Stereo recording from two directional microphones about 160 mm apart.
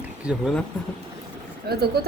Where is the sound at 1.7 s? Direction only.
80° right.